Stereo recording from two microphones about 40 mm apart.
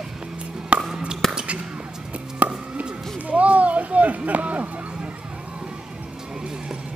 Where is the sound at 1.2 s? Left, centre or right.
Centre.